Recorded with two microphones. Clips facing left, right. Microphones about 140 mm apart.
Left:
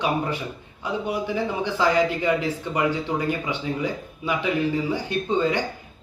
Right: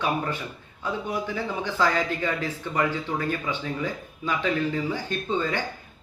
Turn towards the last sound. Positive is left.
turn(degrees=15)  # may be behind; listen again after turning